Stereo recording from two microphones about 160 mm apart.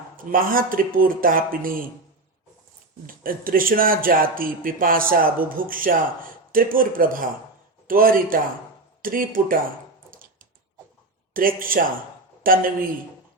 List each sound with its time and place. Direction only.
0.3 s speech: 60° right (ahead or behind)
3.1 s speech: 65° right (ahead or behind)
11.3 s speech: 60° right (ahead or behind)